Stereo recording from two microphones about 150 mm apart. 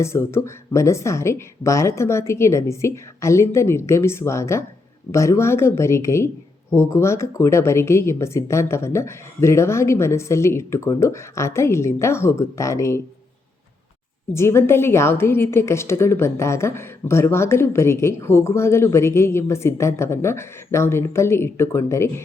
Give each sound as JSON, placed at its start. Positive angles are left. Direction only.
{"t": 0.0, "sound": "speech", "side_deg": 15}
{"t": 14.3, "sound": "speech", "side_deg": 15}